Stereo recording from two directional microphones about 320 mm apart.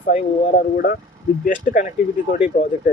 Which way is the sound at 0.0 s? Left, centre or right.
Left.